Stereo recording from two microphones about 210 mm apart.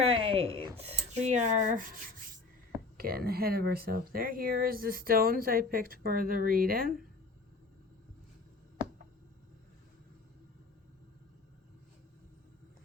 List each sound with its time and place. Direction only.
0.0 s speech: 25° right (ahead or behind); by 6.9 s 45° right (ahead or behind)